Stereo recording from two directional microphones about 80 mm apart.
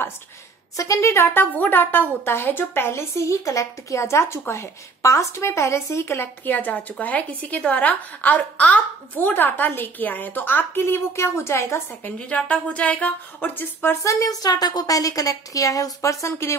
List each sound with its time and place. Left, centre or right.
0.7 s a woman's voice: left
12.3 s a woman's voice: centre
14.0 s a woman's voice: left